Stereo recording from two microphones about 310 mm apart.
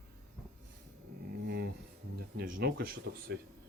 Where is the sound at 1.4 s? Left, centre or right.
Right.